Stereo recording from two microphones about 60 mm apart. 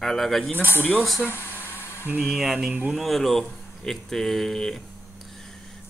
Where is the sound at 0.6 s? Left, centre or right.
Left.